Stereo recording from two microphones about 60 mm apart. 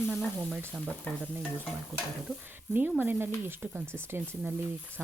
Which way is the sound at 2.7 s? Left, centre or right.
Right.